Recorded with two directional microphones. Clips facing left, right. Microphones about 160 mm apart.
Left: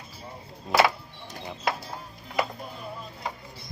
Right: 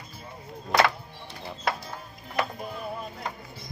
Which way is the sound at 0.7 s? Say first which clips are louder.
Left 1 dB; 5° left (ahead or behind).